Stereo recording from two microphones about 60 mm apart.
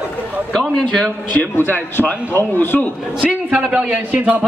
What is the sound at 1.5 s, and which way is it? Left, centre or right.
A man's voice, left.